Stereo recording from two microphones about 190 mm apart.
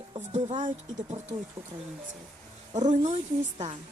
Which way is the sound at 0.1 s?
35° right (ahead or behind).